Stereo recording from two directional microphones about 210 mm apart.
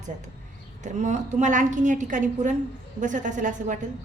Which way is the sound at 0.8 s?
35° right (ahead or behind).